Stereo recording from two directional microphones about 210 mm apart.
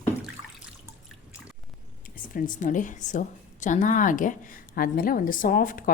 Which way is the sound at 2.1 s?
40° left (ahead or behind).